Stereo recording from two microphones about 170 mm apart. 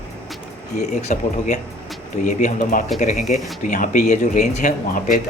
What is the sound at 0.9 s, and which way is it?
Speech, 45° left (ahead or behind).